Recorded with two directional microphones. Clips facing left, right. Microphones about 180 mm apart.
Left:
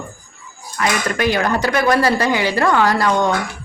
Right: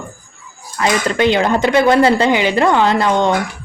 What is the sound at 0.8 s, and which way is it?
Speech, 25° right (ahead or behind).